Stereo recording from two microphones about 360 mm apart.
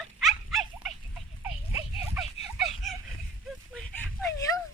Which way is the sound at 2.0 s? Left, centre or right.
Centre.